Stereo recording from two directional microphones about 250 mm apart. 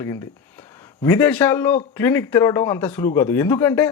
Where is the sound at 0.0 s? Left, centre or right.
Centre.